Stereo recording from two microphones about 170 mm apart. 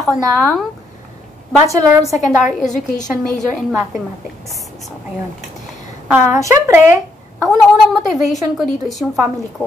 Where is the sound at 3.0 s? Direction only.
5° left (ahead or behind).